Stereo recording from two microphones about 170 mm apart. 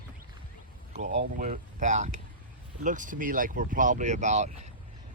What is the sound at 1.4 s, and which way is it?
Speech, 45° right (ahead or behind).